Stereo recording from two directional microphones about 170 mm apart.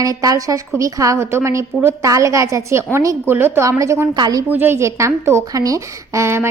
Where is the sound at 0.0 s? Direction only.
20° right (ahead or behind).